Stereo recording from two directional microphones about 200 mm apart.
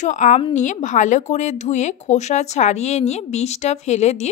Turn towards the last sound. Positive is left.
turn(degrees=35)  # may be behind; listen again after turning